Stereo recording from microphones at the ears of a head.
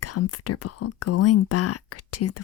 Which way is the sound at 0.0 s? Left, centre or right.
Left.